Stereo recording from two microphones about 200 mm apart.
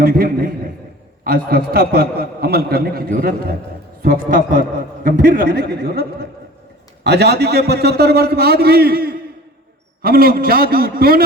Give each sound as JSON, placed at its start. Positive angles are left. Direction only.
{"t": 0.0, "sound": "a man's voice", "side_deg": -50}